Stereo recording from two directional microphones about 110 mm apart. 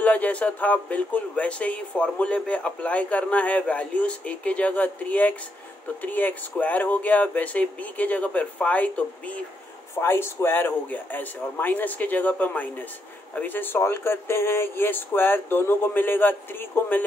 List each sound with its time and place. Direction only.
0.0 s speech: 15° left (ahead or behind)